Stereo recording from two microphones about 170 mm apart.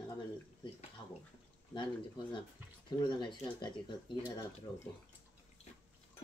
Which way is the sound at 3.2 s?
25° left (ahead or behind).